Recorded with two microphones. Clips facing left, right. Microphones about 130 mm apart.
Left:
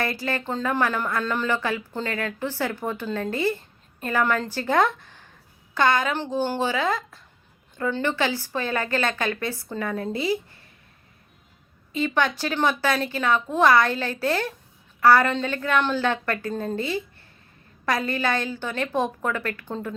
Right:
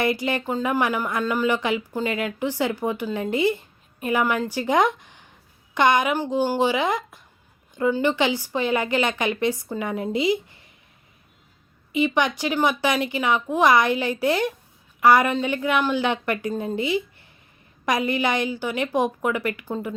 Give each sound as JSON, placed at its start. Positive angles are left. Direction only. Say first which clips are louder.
{"t": 0.0, "sound": "speech", "louder": "right 4 dB", "side_deg": -15}
{"t": 11.9, "sound": "speech", "louder": "right 2 dB", "side_deg": -15}